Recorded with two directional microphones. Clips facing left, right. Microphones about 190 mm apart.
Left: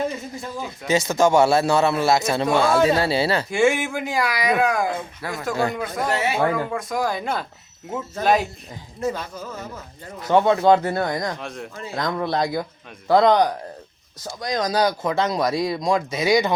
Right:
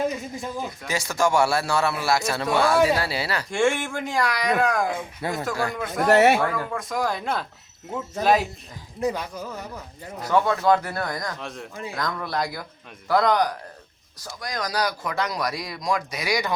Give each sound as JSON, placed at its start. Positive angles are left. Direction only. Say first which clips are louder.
{"t": 0.9, "sound": "speech", "louder": "left 6 dB", "side_deg": 20}
{"t": 3.5, "sound": "speech", "louder": "even", "side_deg": 5}
{"t": 5.2, "sound": "speech", "louder": "right 5 dB", "side_deg": -25}
{"t": 5.7, "sound": "speech", "louder": "even", "side_deg": 0}
{"t": 6.1, "sound": "speech", "louder": "right 9 dB", "side_deg": -65}
{"t": 6.4, "sound": "speech", "louder": "left 4 dB", "side_deg": 15}
{"t": 6.7, "sound": "speech", "louder": "left 2 dB", "side_deg": 0}
{"t": 9.0, "sound": "speech", "louder": "even", "side_deg": -15}
{"t": 10.2, "sound": "speech", "louder": "left 4 dB", "side_deg": 25}
{"t": 11.3, "sound": "speech", "louder": "left 3 dB", "side_deg": 0}
{"t": 11.7, "sound": "speech", "louder": "even", "side_deg": -15}
{"t": 11.9, "sound": "speech", "louder": "left 5 dB", "side_deg": 25}